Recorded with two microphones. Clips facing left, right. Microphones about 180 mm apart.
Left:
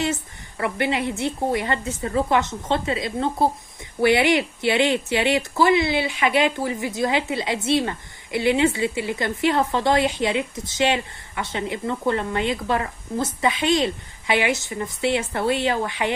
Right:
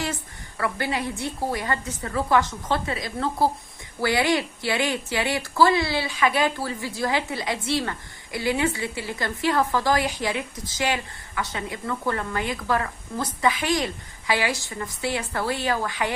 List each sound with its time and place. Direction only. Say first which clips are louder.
0.0 s speech: left 5 dB; 25° left (ahead or behind)